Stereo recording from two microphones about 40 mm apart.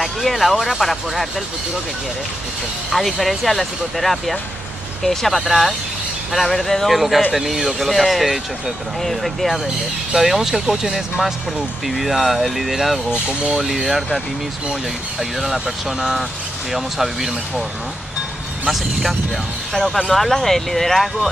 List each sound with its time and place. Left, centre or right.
0.0 s speech: centre
2.9 s speech: centre
7.3 s speech: centre
13.1 s speech: right
13.6 s speech: centre
18.7 s speech: centre